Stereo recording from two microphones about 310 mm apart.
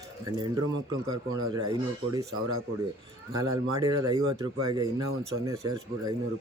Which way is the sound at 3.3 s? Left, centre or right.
Centre.